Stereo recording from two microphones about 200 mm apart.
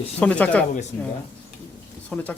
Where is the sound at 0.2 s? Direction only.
5° left (ahead or behind).